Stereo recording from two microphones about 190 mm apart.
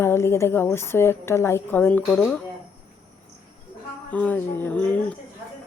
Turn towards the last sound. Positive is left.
turn(degrees=5)  # may be behind; listen again after turning